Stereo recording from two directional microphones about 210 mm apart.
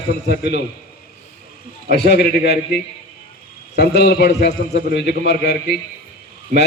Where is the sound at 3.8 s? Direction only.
50° left (ahead or behind).